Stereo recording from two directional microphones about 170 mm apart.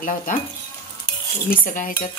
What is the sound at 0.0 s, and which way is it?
Speech, 50° left (ahead or behind).